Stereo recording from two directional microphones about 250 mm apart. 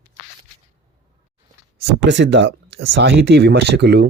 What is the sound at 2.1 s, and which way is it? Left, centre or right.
Speech, right.